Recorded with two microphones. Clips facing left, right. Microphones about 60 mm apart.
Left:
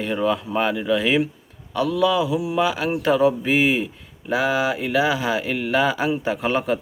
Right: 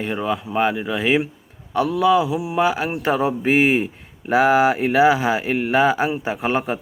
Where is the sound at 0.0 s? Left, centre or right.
Centre.